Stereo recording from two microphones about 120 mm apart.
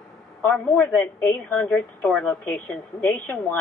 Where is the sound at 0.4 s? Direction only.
15° left (ahead or behind).